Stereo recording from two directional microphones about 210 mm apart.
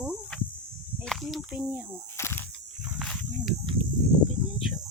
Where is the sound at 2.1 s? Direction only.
10° left (ahead or behind).